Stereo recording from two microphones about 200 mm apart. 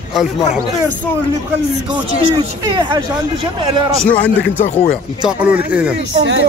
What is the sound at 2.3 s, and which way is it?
Speech, 20° right (ahead or behind).